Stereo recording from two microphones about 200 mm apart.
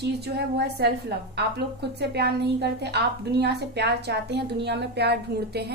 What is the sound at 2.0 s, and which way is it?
A woman's voice, 55° right (ahead or behind).